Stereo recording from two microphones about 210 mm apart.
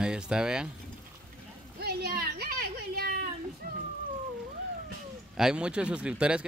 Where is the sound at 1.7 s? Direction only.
50° right (ahead or behind).